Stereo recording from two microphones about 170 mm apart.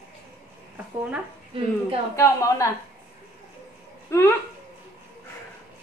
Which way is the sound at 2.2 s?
20° left (ahead or behind).